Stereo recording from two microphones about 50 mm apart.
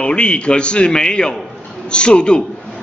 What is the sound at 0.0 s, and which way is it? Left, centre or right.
A man's voice, left.